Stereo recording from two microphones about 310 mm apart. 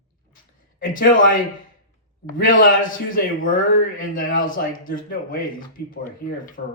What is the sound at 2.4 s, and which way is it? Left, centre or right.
A man's voice, left.